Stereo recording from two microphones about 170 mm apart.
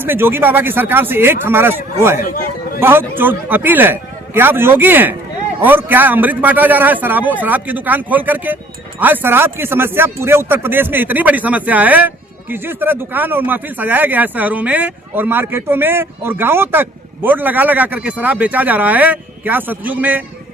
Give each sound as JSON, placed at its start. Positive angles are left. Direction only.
{"t": 0.0, "sound": "speech", "side_deg": -10}
{"t": 2.2, "sound": "chatter", "side_deg": 55}
{"t": 2.8, "sound": "speech", "side_deg": -10}